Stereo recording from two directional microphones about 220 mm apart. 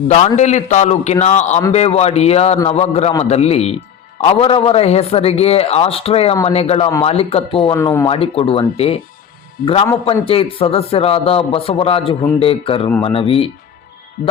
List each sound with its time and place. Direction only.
0.1 s a man's voice: 30° left (ahead or behind)
7.8 s speech: 15° left (ahead or behind)
8.0 s a man's voice: 25° left (ahead or behind)